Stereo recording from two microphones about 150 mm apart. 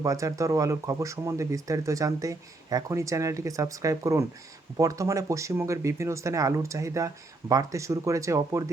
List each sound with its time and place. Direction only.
0.0 s speech: 20° right (ahead or behind)